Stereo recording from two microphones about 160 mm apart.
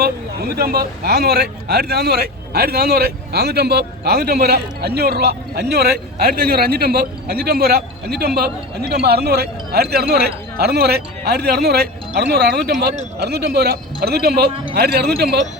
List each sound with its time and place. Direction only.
0.0 s speech: 75° right (ahead or behind)